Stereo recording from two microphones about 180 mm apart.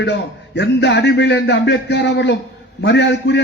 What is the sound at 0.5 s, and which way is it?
A man's voice, 75° left (ahead or behind).